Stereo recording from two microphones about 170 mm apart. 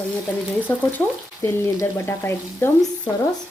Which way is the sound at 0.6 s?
10° left (ahead or behind).